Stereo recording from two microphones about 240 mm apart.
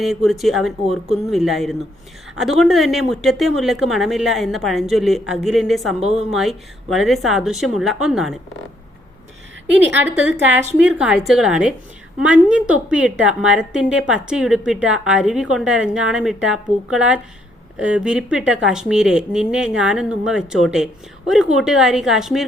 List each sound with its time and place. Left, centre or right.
0.0 s speech: centre
6.0 s a woman's voice: right
6.3 s speech: centre
10.9 s speech: centre